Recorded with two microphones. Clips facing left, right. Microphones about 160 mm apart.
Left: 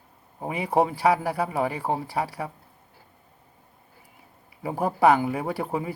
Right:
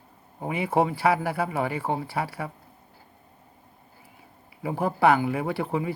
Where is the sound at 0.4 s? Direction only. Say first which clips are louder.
Left 1 dB; 35° left (ahead or behind).